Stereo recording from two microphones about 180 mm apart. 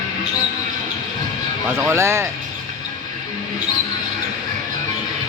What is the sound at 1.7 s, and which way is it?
Speech, 15° right (ahead or behind).